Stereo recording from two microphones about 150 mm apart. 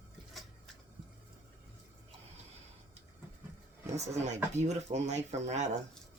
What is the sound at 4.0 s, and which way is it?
Speech, 50° right (ahead or behind).